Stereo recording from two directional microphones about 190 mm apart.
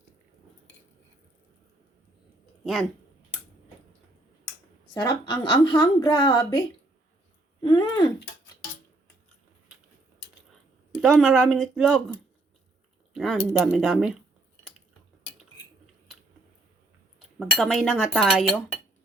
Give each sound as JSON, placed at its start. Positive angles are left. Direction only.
{"t": 4.9, "sound": "a woman's voice", "side_deg": 20}
{"t": 11.0, "sound": "speech", "side_deg": 0}
{"t": 13.1, "sound": "speech", "side_deg": 0}
{"t": 17.6, "sound": "speech", "side_deg": 0}